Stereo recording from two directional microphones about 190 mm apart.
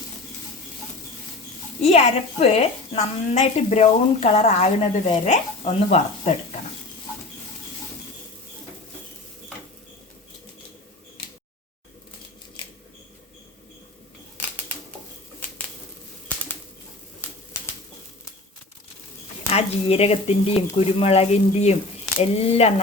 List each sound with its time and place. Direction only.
1.8 s a woman's voice: 35° left (ahead or behind)
19.5 s a woman's voice: 30° left (ahead or behind)